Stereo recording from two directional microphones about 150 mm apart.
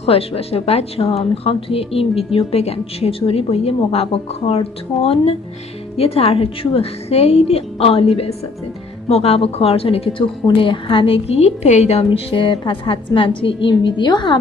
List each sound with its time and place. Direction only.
0.0 s a woman's voice: 40° left (ahead or behind)